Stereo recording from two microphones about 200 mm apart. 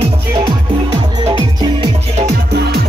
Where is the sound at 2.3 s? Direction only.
55° right (ahead or behind).